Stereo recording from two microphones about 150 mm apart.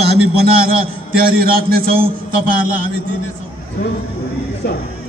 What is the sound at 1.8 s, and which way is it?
Speech, 75° right (ahead or behind).